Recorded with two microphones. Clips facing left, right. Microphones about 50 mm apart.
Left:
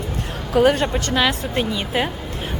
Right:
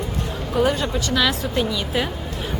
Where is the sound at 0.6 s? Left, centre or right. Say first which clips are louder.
Left 4 dB; left.